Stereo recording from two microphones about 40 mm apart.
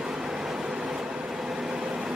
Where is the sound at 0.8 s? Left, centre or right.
Centre.